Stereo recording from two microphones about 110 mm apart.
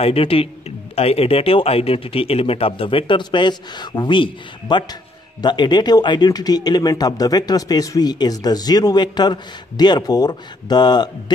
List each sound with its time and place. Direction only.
0.0 s speech: 60° left (ahead or behind); by 11.3 s 40° left (ahead or behind)